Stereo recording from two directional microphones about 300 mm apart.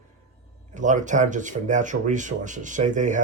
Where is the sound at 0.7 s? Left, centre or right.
Right.